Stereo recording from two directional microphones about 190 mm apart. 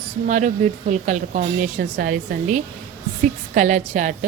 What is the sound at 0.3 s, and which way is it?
A woman's voice, 40° right (ahead or behind).